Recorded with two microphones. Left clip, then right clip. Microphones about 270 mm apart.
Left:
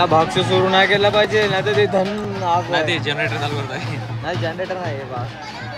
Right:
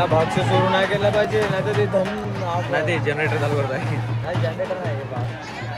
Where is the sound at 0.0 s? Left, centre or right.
Left.